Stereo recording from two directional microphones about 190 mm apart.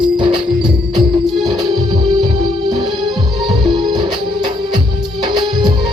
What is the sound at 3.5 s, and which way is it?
Music, 20° right (ahead or behind).